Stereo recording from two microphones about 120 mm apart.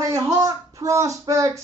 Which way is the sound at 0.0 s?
25° right (ahead or behind).